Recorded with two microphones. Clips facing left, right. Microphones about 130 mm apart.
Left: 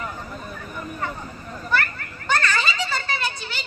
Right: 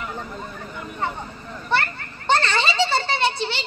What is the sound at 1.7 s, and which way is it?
Children playing, 30° right (ahead or behind).